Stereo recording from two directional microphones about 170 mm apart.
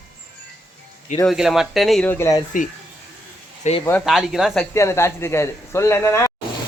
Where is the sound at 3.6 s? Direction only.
45° left (ahead or behind).